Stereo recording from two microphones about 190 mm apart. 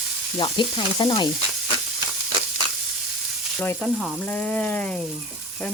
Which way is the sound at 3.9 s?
Centre (ahead or behind).